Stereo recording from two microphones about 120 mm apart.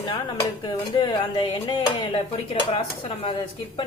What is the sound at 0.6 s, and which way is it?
Speech, 40° left (ahead or behind).